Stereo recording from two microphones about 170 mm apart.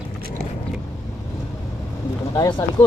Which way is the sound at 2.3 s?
20° left (ahead or behind).